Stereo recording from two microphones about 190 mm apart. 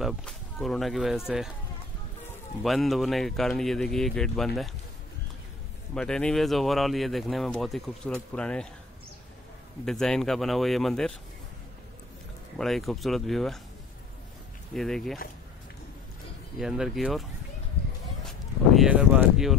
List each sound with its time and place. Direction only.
0.0 s speech: centre (ahead or behind)
2.6 s speech: centre (ahead or behind)
5.9 s speech: 5° left (ahead or behind)
9.8 s speech: 5° left (ahead or behind)
12.5 s speech: centre (ahead or behind)
14.7 s speech: centre (ahead or behind)
16.5 s speech: centre (ahead or behind)
18.8 s speech: 5° right (ahead or behind)